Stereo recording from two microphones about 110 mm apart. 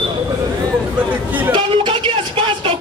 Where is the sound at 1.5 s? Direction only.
50° right (ahead or behind).